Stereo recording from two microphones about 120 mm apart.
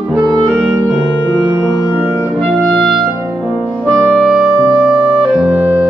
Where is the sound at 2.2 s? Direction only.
10° left (ahead or behind).